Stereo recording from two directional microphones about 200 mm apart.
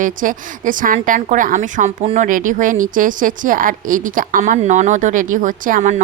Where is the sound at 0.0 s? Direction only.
40° right (ahead or behind).